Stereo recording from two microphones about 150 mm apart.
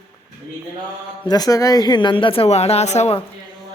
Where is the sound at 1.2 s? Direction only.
25° left (ahead or behind); by 3.2 s 45° left (ahead or behind).